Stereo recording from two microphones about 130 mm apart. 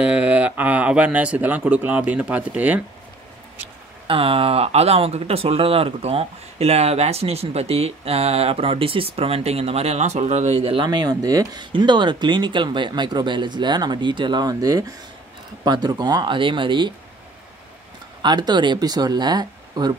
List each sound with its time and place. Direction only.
0.0 s speech: 10° right (ahead or behind)
4.1 s speech: 45° right (ahead or behind)
18.2 s speech: 35° right (ahead or behind)